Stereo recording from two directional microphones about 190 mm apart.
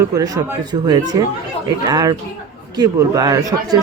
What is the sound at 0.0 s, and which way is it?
Speech, 20° right (ahead or behind).